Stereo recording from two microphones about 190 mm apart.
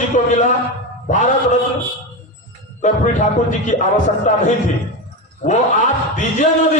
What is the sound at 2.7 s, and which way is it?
A man's voice, 40° left (ahead or behind).